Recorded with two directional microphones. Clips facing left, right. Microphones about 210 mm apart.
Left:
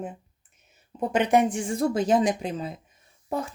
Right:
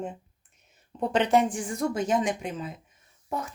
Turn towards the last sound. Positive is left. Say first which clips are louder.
# left 4 dB
turn(degrees=30)  # may be behind; listen again after turning